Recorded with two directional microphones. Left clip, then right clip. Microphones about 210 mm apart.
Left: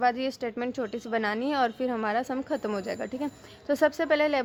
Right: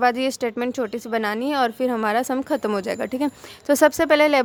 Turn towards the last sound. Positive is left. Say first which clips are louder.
# right 8 dB
turn(degrees=-25)  # may be behind; listen again after turning